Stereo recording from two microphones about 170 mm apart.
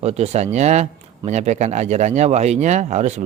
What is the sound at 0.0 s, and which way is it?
Speech, 40° right (ahead or behind).